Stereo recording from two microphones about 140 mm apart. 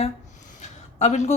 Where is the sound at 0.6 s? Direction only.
55° left (ahead or behind).